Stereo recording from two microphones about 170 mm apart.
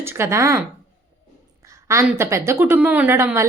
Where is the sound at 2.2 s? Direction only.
15° right (ahead or behind).